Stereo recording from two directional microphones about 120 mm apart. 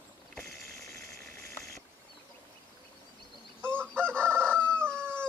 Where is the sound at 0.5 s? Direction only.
Centre (ahead or behind).